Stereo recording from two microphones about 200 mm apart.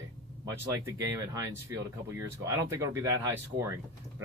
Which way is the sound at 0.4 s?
15° right (ahead or behind).